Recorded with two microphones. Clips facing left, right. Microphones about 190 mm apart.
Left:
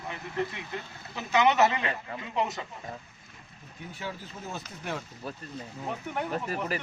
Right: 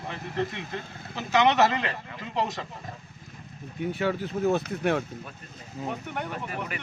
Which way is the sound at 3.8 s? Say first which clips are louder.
Right 12 dB; 65° right (ahead or behind).